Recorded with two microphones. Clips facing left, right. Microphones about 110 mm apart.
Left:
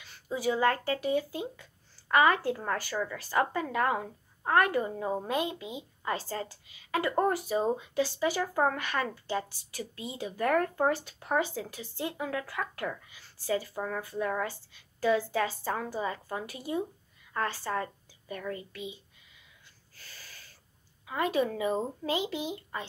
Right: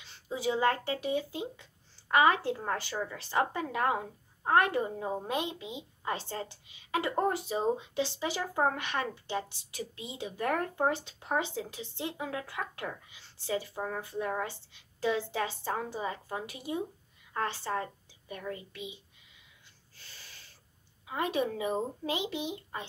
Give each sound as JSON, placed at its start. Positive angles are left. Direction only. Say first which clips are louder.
{"t": 0.0, "sound": "a woman's voice", "louder": "left 2 dB", "side_deg": -25}
{"t": 20.0, "sound": "a sound", "louder": "left 2 dB", "side_deg": -25}
{"t": 21.1, "sound": "a woman's voice", "louder": "left 2 dB", "side_deg": -25}